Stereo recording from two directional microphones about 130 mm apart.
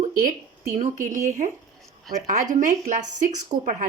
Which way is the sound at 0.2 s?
75° right (ahead or behind).